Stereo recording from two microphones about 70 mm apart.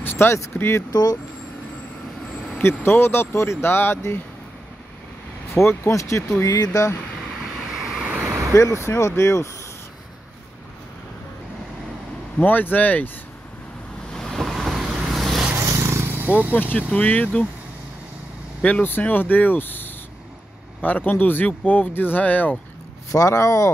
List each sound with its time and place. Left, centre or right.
0.0 s vehicle: left
0.6 s speech: left
2.6 s speech: left
5.5 s speech: left
6.5 s speech: left
7.7 s vehicle: centre
8.0 s vehicle: centre
8.5 s speech: left
12.4 s speech: left
14.1 s vehicle: centre
15.5 s vehicle: right
16.5 s speech: left
18.6 s speech: left
23.1 s speech: left